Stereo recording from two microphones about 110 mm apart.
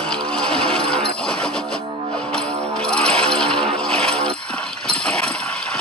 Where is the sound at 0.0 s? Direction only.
10° left (ahead or behind).